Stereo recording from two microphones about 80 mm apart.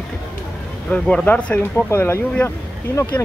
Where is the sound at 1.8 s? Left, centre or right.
Left.